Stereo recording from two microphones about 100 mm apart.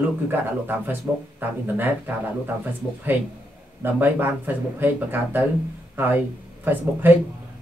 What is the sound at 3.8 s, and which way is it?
Speech, 20° right (ahead or behind).